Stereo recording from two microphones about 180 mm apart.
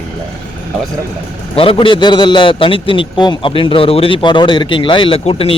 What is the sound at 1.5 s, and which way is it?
A man's voice, 30° left (ahead or behind).